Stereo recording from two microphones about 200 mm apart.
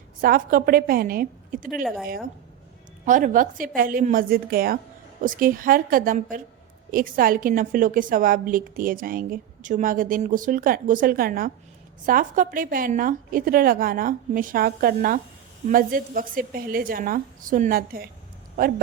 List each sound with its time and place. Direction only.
0.2 s a woman's voice: 45° right (ahead or behind)
3.1 s a woman's voice: 40° right (ahead or behind)